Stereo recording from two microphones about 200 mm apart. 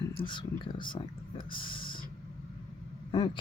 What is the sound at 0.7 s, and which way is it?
Speech, 25° left (ahead or behind).